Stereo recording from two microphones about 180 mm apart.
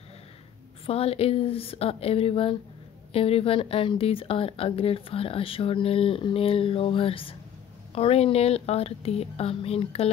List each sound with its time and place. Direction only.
0.8 s speech: 35° left (ahead or behind)